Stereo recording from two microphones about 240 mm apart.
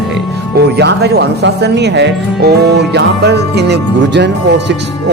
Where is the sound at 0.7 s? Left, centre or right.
Right.